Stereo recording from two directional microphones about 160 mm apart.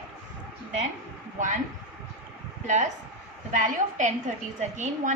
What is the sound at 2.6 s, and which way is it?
A woman's voice, 50° right (ahead or behind).